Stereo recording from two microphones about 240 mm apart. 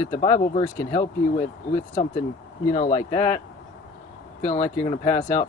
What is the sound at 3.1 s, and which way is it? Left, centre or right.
Speech, left.